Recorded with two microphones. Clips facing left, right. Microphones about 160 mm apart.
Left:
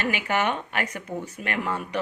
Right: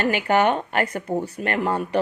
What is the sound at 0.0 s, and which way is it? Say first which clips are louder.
Speech: right 6 dB; 35° right (ahead or behind).